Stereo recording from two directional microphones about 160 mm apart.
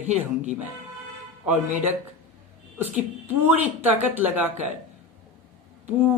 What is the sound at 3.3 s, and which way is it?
A woman's voice, 10° right (ahead or behind).